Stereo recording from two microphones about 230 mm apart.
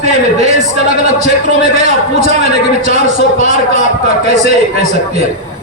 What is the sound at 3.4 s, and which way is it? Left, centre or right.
A man's voice, right.